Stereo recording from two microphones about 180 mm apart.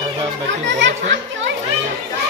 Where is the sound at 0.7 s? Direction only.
90° right.